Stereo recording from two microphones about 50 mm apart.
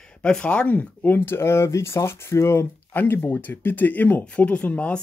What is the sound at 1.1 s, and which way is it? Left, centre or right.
Speech, left.